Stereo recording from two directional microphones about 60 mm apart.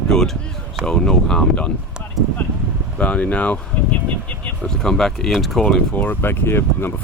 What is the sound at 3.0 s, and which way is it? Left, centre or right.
Speech, left.